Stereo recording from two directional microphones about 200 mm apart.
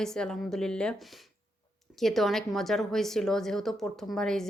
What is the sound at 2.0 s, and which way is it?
Speech, centre (ahead or behind).